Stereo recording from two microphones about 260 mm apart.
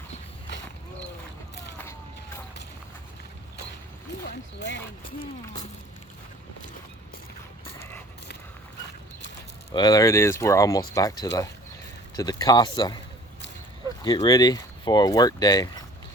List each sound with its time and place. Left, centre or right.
1.8 s vehicle: centre
9.7 s speech: centre
14.0 s speech: centre